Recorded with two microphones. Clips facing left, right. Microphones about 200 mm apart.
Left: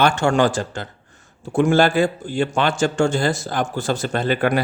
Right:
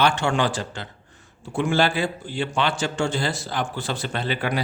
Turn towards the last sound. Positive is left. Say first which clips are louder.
# left 7 dB
turn(degrees=50)  # may be behind; listen again after turning